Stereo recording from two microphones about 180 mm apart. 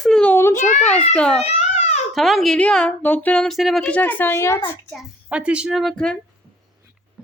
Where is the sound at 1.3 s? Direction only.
35° left (ahead or behind).